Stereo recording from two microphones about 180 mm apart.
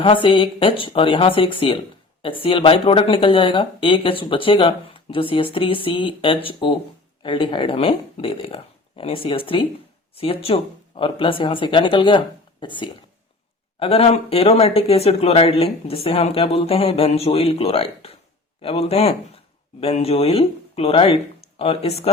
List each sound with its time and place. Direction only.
0.0 s speech: 30° left (ahead or behind)